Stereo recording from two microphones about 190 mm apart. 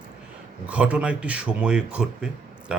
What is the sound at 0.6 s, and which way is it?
Speech, 5° right (ahead or behind).